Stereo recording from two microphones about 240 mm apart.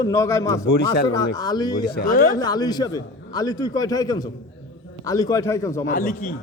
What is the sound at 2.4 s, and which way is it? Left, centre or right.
A man's voice, centre.